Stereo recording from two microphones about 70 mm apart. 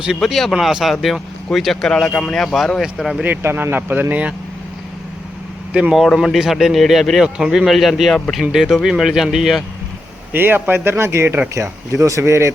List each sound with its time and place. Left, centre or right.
0.2 s speech: centre
3.4 s speech: right
6.1 s speech: centre
10.3 s speech: right